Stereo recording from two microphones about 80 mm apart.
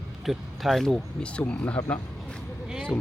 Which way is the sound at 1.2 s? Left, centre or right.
Centre.